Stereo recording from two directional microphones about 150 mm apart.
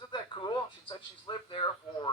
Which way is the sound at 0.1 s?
30° left (ahead or behind).